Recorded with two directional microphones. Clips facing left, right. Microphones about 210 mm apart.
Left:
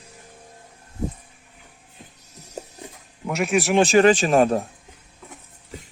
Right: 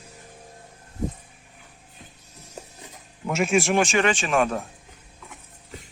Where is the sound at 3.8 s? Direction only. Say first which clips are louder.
Left 7 dB; 35° left (ahead or behind).